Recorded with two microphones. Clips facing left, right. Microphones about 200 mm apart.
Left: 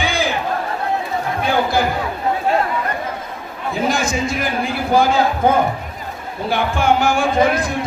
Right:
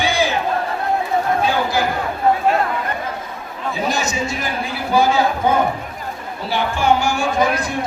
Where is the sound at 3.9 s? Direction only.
50° left (ahead or behind).